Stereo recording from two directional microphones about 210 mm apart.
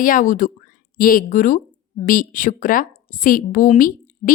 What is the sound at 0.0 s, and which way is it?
Speech, 40° left (ahead or behind).